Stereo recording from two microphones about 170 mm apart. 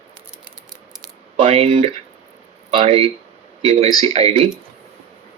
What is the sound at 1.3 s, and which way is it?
Speech, 35° right (ahead or behind).